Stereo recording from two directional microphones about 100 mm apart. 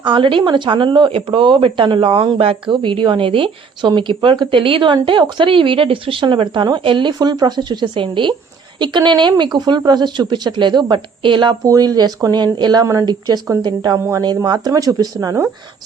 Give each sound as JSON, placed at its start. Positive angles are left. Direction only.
{"t": 0.0, "sound": "speech", "side_deg": -55}
{"t": 11.6, "sound": "speech", "side_deg": -35}
{"t": 12.8, "sound": "speech", "side_deg": -30}
{"t": 13.1, "sound": "speech", "side_deg": -45}